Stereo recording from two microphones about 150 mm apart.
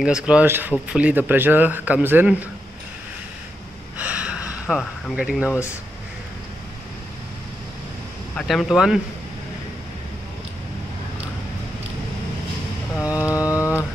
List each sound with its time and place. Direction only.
0.0 s speech: 5° right (ahead or behind)
4.0 s a sound: 10° right (ahead or behind)
8.4 s speech: centre (ahead or behind)
12.9 s mantra: 20° left (ahead or behind)